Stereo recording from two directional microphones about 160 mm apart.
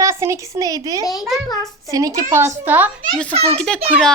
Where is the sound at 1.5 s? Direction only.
20° left (ahead or behind).